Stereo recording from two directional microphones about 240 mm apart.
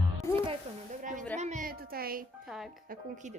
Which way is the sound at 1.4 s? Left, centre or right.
Right.